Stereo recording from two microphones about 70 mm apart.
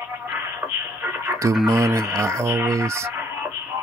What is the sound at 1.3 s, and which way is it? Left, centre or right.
Music, right.